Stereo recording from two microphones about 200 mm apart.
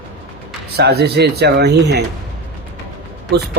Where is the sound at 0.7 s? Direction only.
55° right (ahead or behind).